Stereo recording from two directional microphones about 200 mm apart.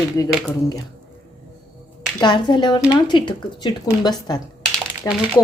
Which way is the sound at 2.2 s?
20° left (ahead or behind).